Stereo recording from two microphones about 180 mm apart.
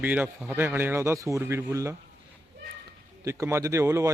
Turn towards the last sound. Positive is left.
turn(degrees=-15)  # may be behind; listen again after turning